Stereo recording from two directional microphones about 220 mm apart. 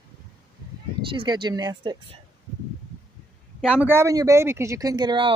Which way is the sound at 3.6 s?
5° right (ahead or behind).